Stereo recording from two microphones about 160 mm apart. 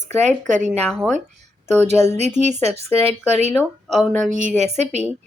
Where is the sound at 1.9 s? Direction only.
45° right (ahead or behind).